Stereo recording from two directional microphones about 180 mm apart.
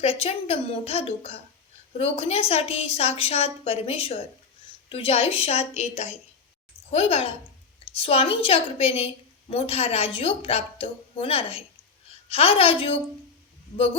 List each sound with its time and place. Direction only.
0.0 s a woman's voice: 35° left (ahead or behind)